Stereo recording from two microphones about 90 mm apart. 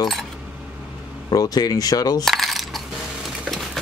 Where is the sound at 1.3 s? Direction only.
45° left (ahead or behind).